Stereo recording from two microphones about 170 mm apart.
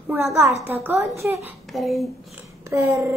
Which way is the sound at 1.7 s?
Centre (ahead or behind).